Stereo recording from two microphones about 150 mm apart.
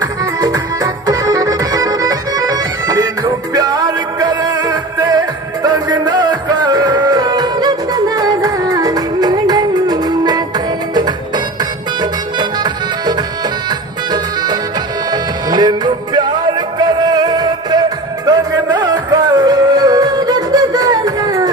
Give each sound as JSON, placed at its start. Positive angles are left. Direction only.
{"t": 1.0, "sound": "accordion", "side_deg": -25}
{"t": 11.0, "sound": "music", "side_deg": -30}
{"t": 15.5, "sound": "music", "side_deg": -30}